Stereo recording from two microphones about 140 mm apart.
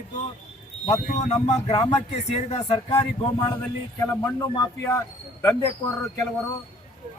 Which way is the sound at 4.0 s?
20° left (ahead or behind).